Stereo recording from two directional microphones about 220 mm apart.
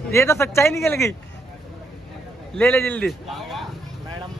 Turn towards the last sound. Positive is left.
turn(degrees=5)  # may be behind; listen again after turning